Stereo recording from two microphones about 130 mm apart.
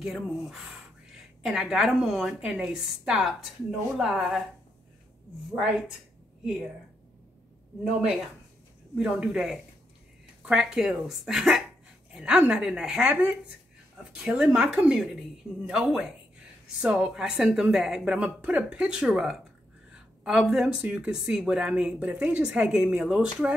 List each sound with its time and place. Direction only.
0.0 s a woman's voice: 5° right (ahead or behind)
5.5 s a woman's voice: 5° right (ahead or behind)
7.8 s a woman's voice: 5° right (ahead or behind)